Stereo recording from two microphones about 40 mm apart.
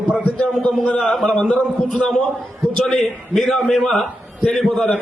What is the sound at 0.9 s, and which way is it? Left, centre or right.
Speech, left.